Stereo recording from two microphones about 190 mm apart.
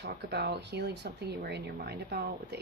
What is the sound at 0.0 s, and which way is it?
Speech, 60° right (ahead or behind).